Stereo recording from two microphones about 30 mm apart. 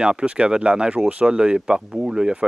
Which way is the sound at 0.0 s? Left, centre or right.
Right.